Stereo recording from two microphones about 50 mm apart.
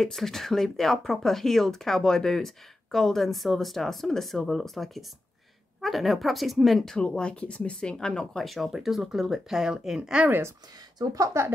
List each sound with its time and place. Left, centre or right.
0.0 s speech: centre
7.0 s speech: left
8.5 s speech: centre
11.1 s speech: right